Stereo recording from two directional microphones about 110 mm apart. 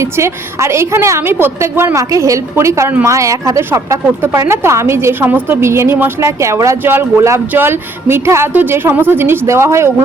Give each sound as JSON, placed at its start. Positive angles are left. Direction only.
{"t": 0.0, "sound": "a woman's voice", "side_deg": -25}